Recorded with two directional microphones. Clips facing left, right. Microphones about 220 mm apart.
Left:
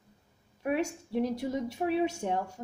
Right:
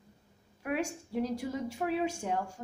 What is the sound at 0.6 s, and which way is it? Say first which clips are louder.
A woman's voice: left 3 dB; 25° left (ahead or behind).